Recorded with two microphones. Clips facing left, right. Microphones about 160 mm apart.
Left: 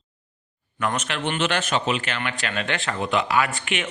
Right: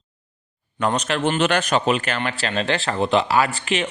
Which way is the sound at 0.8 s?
30° right (ahead or behind).